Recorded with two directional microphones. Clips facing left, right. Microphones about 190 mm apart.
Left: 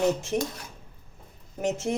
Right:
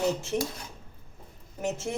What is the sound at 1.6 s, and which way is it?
Speech, 15° left (ahead or behind).